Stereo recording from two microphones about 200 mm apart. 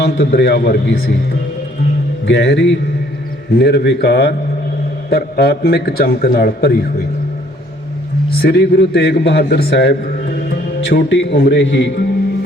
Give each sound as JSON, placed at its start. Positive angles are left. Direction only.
{"t": 0.0, "sound": "a man's voice", "side_deg": 60}
{"t": 2.2, "sound": "a man's voice", "side_deg": 60}
{"t": 8.3, "sound": "a man's voice", "side_deg": 50}